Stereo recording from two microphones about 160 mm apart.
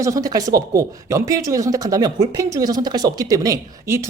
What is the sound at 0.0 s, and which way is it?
Speech, 20° right (ahead or behind).